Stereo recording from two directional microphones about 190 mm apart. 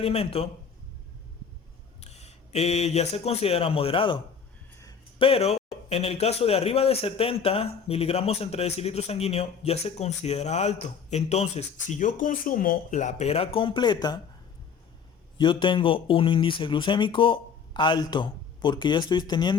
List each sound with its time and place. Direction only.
0.0 s a man's voice: 30° left (ahead or behind)
2.0 s speech: 35° left (ahead or behind)
5.2 s a man's voice: 30° left (ahead or behind)
15.4 s speech: 25° left (ahead or behind)